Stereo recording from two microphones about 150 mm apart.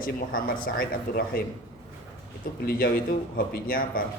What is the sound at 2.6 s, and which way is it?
A man's voice, 80° left.